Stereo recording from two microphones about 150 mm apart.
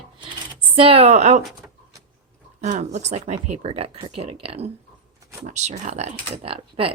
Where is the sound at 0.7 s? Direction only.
40° right (ahead or behind).